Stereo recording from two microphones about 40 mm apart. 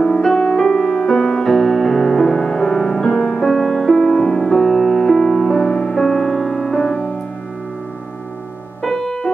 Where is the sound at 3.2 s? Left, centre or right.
Left.